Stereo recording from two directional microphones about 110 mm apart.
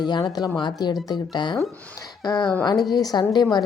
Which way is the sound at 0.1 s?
40° left (ahead or behind).